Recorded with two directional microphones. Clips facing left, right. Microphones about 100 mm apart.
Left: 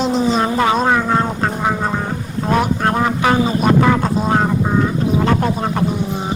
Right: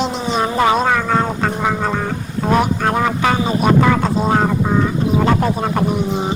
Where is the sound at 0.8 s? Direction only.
15° left (ahead or behind).